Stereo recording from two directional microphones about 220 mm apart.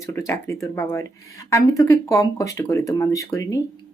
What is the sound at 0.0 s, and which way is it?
Speech, 10° left (ahead or behind).